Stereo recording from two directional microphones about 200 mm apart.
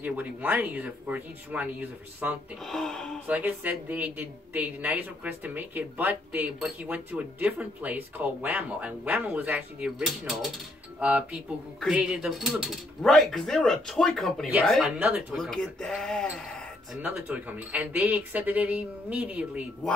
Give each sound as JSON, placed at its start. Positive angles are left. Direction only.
{"t": 0.0, "sound": "speech", "side_deg": -10}
{"t": 2.6, "sound": "speech", "side_deg": 5}
{"t": 3.3, "sound": "speech", "side_deg": -10}
{"t": 17.0, "sound": "speech", "side_deg": -10}